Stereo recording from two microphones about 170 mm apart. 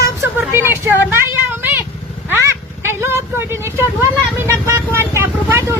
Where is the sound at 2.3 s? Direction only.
15° right (ahead or behind).